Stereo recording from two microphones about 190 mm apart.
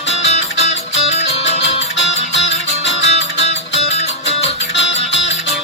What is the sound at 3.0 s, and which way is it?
Music, 35° left (ahead or behind).